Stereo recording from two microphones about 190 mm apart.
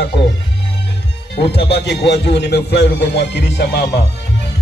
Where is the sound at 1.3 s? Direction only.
60° left (ahead or behind).